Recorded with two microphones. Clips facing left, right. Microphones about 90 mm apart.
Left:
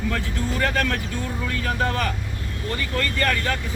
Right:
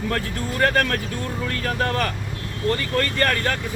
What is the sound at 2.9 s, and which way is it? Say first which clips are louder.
Speech: left 2 dB; 50° right (ahead or behind).